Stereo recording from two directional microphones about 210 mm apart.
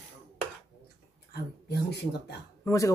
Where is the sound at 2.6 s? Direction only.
15° left (ahead or behind).